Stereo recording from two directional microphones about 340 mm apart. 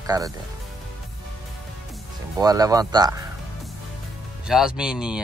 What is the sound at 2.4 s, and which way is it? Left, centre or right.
Speech, centre.